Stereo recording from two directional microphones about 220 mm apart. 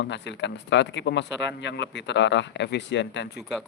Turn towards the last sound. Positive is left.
turn(degrees=55)  # may be behind; listen again after turning